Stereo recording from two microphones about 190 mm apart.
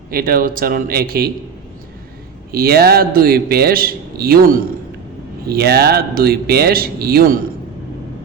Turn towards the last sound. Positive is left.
turn(degrees=-55)  # may be behind; listen again after turning